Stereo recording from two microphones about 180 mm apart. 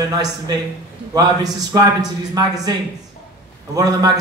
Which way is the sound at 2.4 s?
20° right (ahead or behind).